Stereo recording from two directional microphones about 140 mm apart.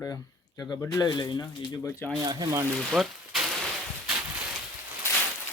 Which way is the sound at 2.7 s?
Centre (ahead or behind).